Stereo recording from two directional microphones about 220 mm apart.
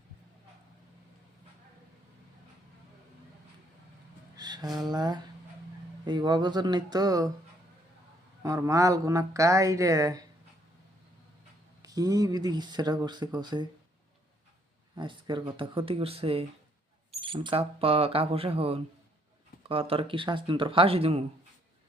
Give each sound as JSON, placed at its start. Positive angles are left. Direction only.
{"t": 4.4, "sound": "a sound", "side_deg": -20}
{"t": 4.9, "sound": "speech", "side_deg": -20}
{"t": 8.4, "sound": "a woman's voice", "side_deg": -15}
{"t": 11.8, "sound": "speech", "side_deg": -15}
{"t": 14.9, "sound": "speech", "side_deg": -20}